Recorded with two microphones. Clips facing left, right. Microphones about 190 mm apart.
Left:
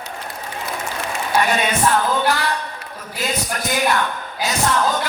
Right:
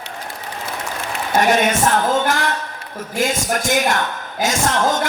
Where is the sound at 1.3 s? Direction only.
45° right (ahead or behind).